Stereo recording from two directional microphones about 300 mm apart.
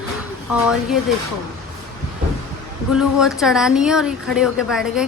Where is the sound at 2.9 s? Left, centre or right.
Centre.